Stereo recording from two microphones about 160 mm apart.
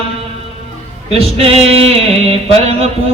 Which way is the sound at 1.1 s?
40° right (ahead or behind).